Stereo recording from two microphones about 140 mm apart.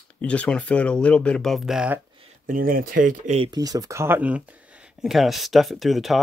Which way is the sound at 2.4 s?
90° right.